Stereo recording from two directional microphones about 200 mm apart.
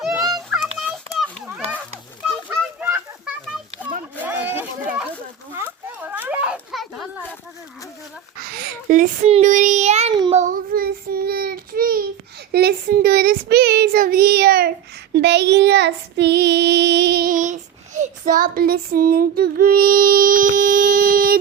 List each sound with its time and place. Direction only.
0.5 s child singing: centre (ahead or behind)
2.2 s children playing: 5° right (ahead or behind)
4.2 s a sound: 10° right (ahead or behind)
6.0 s children playing: 10° right (ahead or behind)
8.4 s child singing: 50° right (ahead or behind); by 10.4 s 25° right (ahead or behind)
10.4 s child singing: 45° right (ahead or behind)